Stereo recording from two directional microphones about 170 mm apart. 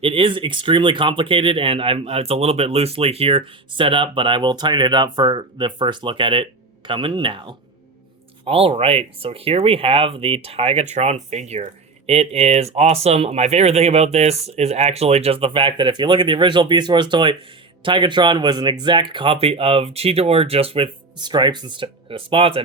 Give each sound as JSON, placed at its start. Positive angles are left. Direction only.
{"t": 0.0, "sound": "speech", "side_deg": -35}